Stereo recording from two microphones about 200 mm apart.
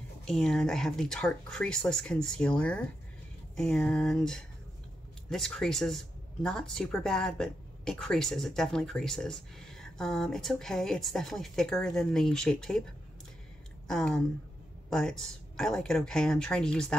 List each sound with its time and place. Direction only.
0.2 s speech: centre (ahead or behind)
13.8 s speech: 5° left (ahead or behind)